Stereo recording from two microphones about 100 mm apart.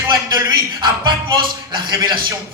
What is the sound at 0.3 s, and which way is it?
A man's voice, 45° right (ahead or behind).